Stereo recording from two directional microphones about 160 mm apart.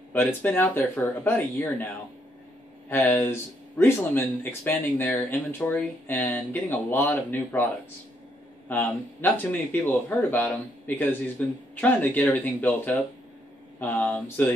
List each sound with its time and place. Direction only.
0.1 s speech: 10° left (ahead or behind)
2.9 s speech: 10° left (ahead or behind)
8.6 s speech: 10° left (ahead or behind)